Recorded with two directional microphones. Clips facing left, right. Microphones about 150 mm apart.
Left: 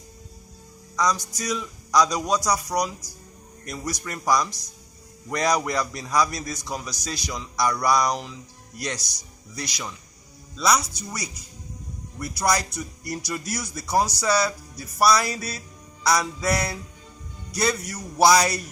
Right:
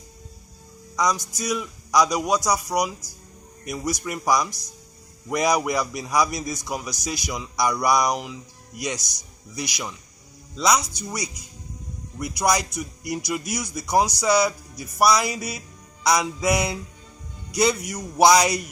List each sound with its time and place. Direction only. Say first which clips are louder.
0.9 s a man's voice: right 1 dB; 15° right (ahead or behind)
9.0 s a man's voice: right 1 dB; 10° left (ahead or behind)
9.6 s a man's voice: right 2 dB; 10° right (ahead or behind)